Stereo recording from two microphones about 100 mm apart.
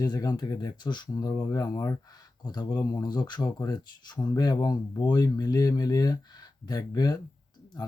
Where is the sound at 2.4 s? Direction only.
45° left (ahead or behind).